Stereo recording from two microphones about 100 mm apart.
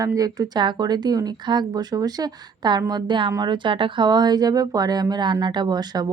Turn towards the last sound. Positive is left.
turn(degrees=-45)  # may be behind; listen again after turning